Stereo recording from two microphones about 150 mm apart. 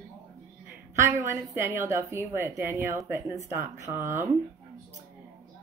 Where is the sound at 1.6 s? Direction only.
15° right (ahead or behind).